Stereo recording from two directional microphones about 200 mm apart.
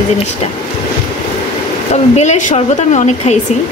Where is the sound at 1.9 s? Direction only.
35° left (ahead or behind).